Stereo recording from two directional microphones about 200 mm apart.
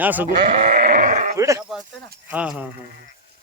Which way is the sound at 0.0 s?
10° right (ahead or behind).